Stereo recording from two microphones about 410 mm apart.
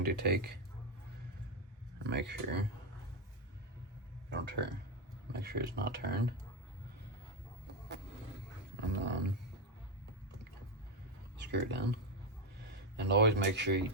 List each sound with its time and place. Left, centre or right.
0.0 s speech: right
2.0 s speech: right
4.3 s speech: right
8.7 s speech: right
11.3 s speech: right
13.0 s speech: right